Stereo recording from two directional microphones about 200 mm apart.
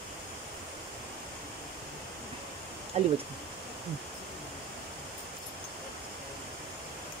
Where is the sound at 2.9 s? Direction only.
35° right (ahead or behind).